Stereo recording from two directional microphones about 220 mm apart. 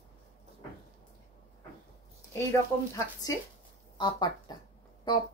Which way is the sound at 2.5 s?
15° left (ahead or behind).